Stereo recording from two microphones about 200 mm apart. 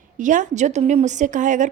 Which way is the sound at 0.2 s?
40° right (ahead or behind).